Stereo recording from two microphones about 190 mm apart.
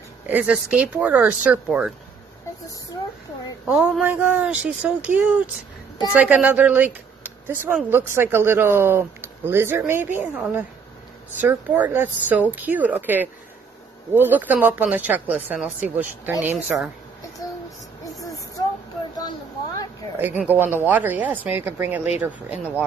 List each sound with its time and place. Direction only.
0.3 s speech: 5° right (ahead or behind)
3.6 s speech: 5° right (ahead or behind)
17.4 s child singing: 20° left (ahead or behind)
20.2 s speech: 10° right (ahead or behind)